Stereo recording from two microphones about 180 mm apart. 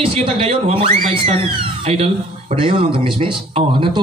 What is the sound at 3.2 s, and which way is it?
Speech, 30° right (ahead or behind).